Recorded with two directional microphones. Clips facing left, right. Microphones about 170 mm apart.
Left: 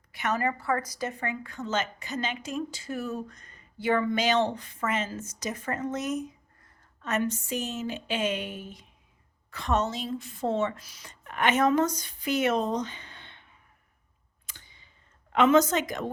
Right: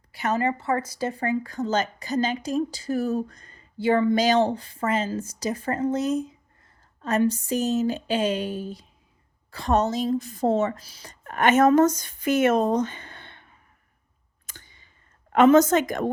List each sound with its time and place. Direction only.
0.1 s a woman's voice: 30° right (ahead or behind); by 13.5 s 50° right (ahead or behind)
14.4 s clicking: 50° right (ahead or behind)
15.3 s a woman's voice: 45° right (ahead or behind)